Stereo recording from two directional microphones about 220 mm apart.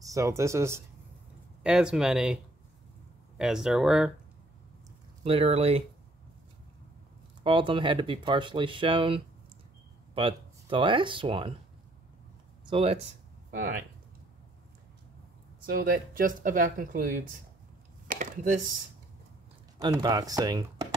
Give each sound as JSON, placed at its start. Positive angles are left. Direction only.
{"t": 0.0, "sound": "speech", "side_deg": -15}
{"t": 3.3, "sound": "speech", "side_deg": -5}
{"t": 5.2, "sound": "speech", "side_deg": -25}
{"t": 7.4, "sound": "speech", "side_deg": -20}
{"t": 12.6, "sound": "speech", "side_deg": -25}
{"t": 13.5, "sound": "speech", "side_deg": -40}
{"t": 15.6, "sound": "speech", "side_deg": -40}
{"t": 18.0, "sound": "a sound", "side_deg": -40}
{"t": 19.8, "sound": "speech", "side_deg": -20}